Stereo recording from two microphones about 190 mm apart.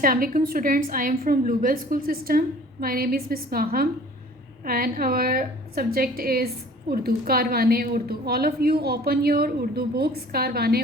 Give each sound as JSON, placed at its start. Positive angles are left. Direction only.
{"t": 0.0, "sound": "a woman's voice", "side_deg": -50}